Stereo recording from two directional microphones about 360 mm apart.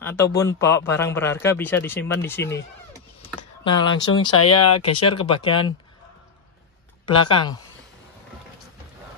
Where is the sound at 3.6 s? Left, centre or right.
Centre.